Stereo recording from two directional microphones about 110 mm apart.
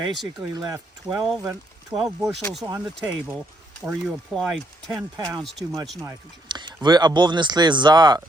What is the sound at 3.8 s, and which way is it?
Speech, centre (ahead or behind).